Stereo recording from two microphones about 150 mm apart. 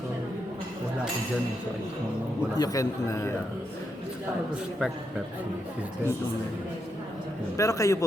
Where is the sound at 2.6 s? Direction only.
20° left (ahead or behind).